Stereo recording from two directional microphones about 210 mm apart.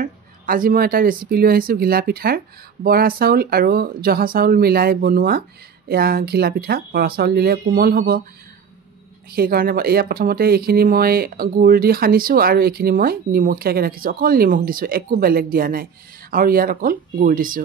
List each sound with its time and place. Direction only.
0.0 s speech: 40° right (ahead or behind)
9.3 s speech: 45° right (ahead or behind)